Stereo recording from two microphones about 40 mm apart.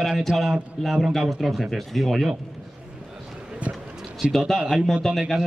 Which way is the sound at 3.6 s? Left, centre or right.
Right.